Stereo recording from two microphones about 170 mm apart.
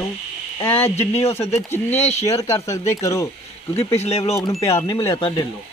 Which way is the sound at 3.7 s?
35° left (ahead or behind).